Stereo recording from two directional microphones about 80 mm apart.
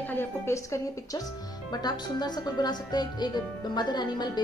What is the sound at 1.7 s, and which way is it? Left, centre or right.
Speech, left.